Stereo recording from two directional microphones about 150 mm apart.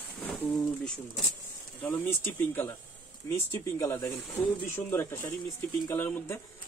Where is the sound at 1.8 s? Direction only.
15° left (ahead or behind).